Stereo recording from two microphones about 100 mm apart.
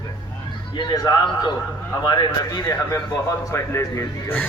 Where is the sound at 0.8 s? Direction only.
45° left (ahead or behind).